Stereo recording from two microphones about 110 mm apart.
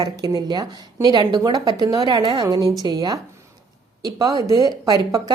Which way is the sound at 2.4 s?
35° right (ahead or behind).